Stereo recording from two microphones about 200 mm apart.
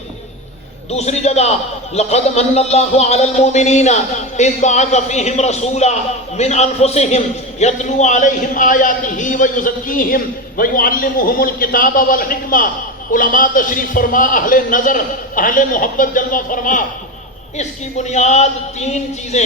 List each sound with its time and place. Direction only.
0.9 s a man's voice: 35° left (ahead or behind)